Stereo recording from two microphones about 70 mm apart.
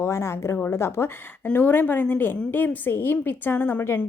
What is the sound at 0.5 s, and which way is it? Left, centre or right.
Speech, left.